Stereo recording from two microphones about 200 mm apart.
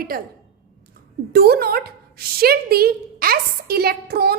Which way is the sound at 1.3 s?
50° right (ahead or behind).